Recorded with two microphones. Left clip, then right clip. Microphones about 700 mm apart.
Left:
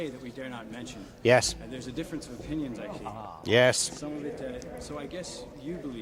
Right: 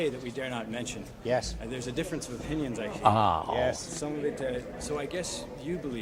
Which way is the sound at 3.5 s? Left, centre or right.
Left.